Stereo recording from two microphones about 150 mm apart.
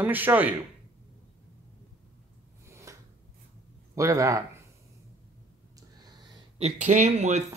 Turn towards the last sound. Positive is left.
turn(degrees=-50)  # may be behind; listen again after turning